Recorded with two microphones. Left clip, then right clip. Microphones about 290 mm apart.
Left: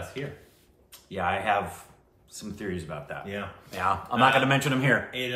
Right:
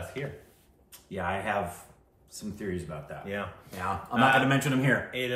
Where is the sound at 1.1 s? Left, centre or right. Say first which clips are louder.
Left 5 dB; centre.